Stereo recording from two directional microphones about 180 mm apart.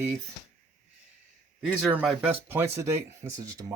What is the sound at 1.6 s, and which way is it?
Speech, 5° right (ahead or behind).